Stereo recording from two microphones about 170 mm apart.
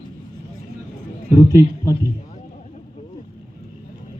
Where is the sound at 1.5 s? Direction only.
20° left (ahead or behind).